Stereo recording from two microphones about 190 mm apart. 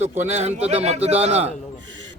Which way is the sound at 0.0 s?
35° right (ahead or behind).